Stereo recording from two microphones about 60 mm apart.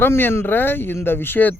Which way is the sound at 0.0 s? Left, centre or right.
Left.